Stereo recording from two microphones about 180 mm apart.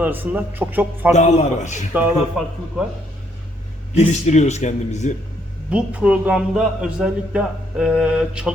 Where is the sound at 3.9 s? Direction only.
40° left (ahead or behind).